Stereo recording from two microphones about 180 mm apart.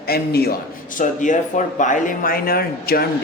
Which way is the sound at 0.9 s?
45° left (ahead or behind).